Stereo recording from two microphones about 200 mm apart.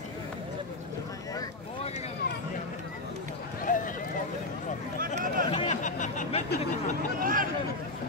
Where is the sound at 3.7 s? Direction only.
40° left (ahead or behind).